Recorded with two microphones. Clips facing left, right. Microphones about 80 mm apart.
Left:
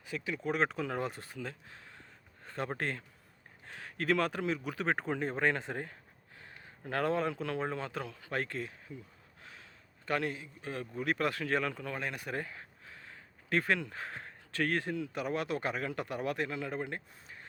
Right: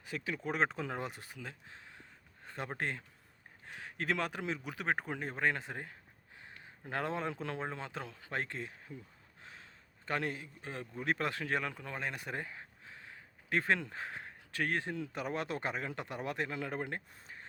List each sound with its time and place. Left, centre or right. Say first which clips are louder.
0.0 s speech: left 2 dB; right; by 1.5 s centre
1.6 s a sound: left 1 dB; right
2.7 s speech: left 2 dB; centre
6.3 s speech: left 1 dB; centre
9.4 s a sound: even; right
10.1 s a man's voice: left 3 dB; right
10.3 s speech: even; right
10.7 s speech: left 2 dB; right
14.9 s a man's voice: left 3 dB; right